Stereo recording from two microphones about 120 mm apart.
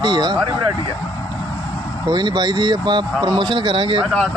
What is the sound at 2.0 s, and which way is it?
Speech, 35° right (ahead or behind).